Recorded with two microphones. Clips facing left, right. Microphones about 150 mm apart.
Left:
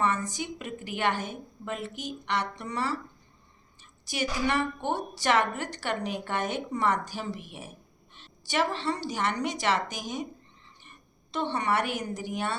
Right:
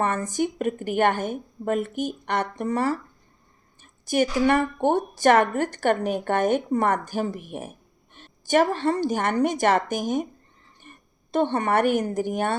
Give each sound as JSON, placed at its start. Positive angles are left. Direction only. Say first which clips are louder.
{"t": 0.0, "sound": "a woman's voice", "louder": "right 5 dB", "side_deg": -50}